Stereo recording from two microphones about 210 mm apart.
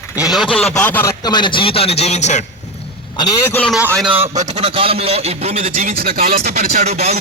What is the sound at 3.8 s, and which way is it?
Speech, 10° right (ahead or behind).